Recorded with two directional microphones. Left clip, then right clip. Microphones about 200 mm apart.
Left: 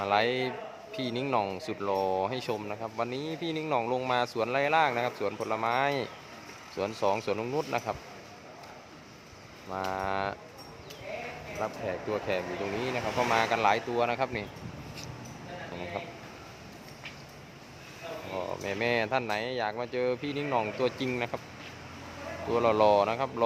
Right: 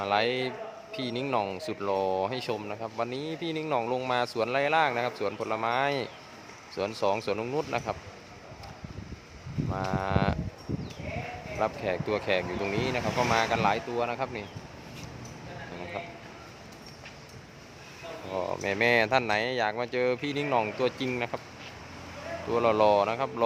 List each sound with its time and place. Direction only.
0.0 s speech: 5° right (ahead or behind)
9.7 s speech: 5° right (ahead or behind)
11.6 s speech: 20° right (ahead or behind); by 14.4 s 5° left (ahead or behind)
18.3 s speech: 20° right (ahead or behind)
22.5 s speech: 5° right (ahead or behind)